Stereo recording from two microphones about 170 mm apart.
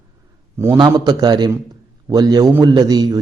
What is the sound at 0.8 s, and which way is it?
A man's voice, 25° right (ahead or behind).